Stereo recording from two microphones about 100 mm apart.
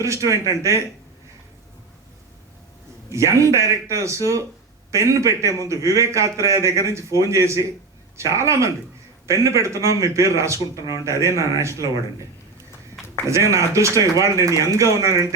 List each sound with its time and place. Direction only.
0.0 s a man's voice: 30° right (ahead or behind)
3.1 s a man's voice: 30° right (ahead or behind)
13.2 s a man's voice: 30° right (ahead or behind)